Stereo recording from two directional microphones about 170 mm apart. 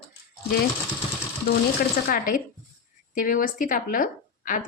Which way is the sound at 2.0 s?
55° left (ahead or behind).